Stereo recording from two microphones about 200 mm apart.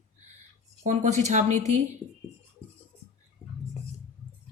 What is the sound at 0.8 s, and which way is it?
Speech, 35° right (ahead or behind).